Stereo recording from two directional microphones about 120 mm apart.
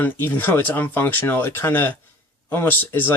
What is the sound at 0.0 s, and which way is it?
Speech, 15° left (ahead or behind).